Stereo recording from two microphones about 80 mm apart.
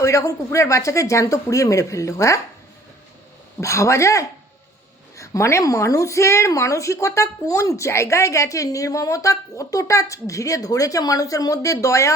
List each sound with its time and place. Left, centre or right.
0.0 s a woman's voice: left
3.6 s a woman's voice: left